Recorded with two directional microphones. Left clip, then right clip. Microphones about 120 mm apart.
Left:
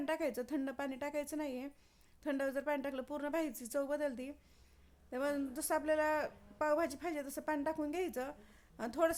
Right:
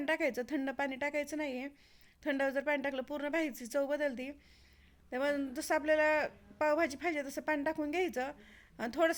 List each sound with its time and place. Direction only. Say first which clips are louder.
0.0 s a man's voice: right 4 dB; 20° right (ahead or behind)